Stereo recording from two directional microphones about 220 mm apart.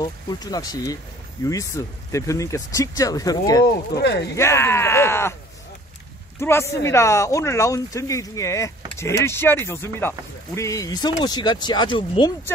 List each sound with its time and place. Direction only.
0.0 s speech: 20° left (ahead or behind)
4.0 s speech: 50° left (ahead or behind)
4.4 s speech: 10° left (ahead or behind)
6.4 s speech: 10° left (ahead or behind)